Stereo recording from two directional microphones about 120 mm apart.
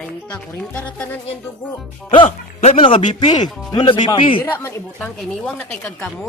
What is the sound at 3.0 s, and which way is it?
Speech, 85° left.